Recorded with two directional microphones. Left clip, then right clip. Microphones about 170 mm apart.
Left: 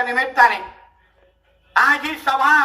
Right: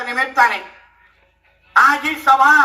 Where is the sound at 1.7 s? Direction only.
20° left (ahead or behind).